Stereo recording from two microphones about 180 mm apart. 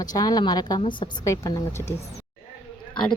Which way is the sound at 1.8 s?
35° left (ahead or behind).